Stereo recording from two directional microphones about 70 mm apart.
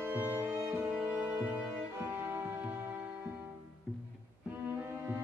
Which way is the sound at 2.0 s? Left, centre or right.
Right.